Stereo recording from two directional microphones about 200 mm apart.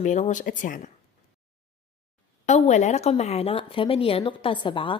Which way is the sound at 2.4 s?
35° left (ahead or behind).